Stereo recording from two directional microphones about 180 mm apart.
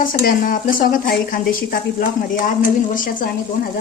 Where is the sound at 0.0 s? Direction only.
50° left (ahead or behind).